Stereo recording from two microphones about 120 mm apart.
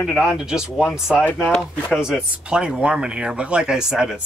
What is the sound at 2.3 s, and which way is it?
Speech, 10° right (ahead or behind).